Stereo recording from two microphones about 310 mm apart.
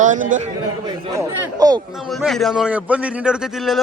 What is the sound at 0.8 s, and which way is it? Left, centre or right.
Speech, centre.